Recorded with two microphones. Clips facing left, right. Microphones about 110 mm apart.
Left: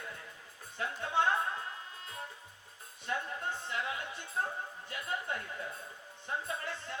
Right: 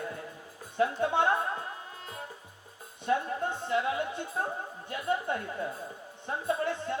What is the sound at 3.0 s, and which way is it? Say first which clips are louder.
A man's voice: right 8 dB; 25° right (ahead or behind).